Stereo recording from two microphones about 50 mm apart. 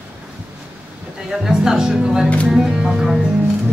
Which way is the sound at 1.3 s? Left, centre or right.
Centre.